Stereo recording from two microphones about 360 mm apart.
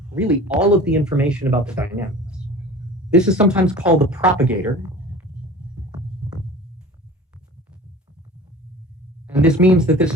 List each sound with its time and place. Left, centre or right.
0.1 s speech: centre
9.2 s speech: centre